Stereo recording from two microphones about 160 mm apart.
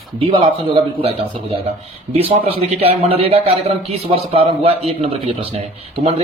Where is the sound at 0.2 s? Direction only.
35° right (ahead or behind).